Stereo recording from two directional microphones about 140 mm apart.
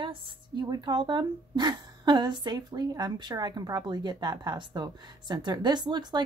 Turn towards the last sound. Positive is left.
turn(degrees=-30)  # may be behind; listen again after turning